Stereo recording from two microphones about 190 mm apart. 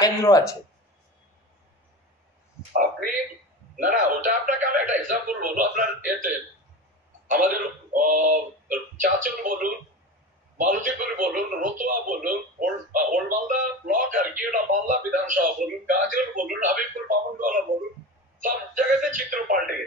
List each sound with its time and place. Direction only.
0.0 s speech: 15° left (ahead or behind)
2.7 s speech: 45° right (ahead or behind)
19.0 s speech: 45° right (ahead or behind)